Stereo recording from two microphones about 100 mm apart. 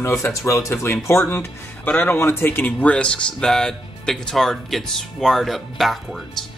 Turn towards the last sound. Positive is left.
turn(degrees=0)  # may be behind; listen again after turning